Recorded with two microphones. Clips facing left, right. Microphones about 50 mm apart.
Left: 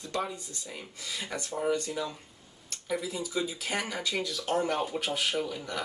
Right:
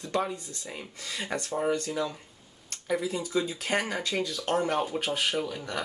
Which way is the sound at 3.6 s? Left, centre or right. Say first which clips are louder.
Right 4 dB; right.